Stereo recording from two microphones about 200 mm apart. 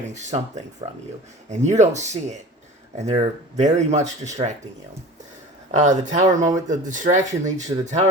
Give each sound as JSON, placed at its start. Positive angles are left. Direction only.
{"t": 0.1, "sound": "speech", "side_deg": -35}
{"t": 5.7, "sound": "speech", "side_deg": -35}